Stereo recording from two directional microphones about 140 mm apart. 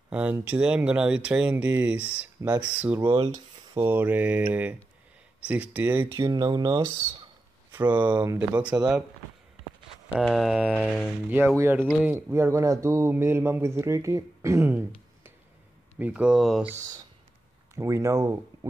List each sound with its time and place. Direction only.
0.1 s speech: 10° right (ahead or behind)
3.1 s speech: 35° right (ahead or behind)
3.7 s speech: 15° right (ahead or behind)
6.1 s speech: 30° right (ahead or behind)
7.9 s speech: 10° right (ahead or behind)
10.2 s speech: centre (ahead or behind); by 14.9 s 15° right (ahead or behind)
16.0 s speech: 10° right (ahead or behind)
16.7 s speech: 25° right (ahead or behind)